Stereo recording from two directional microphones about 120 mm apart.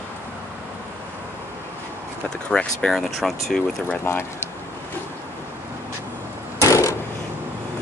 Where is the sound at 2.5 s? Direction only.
5° left (ahead or behind).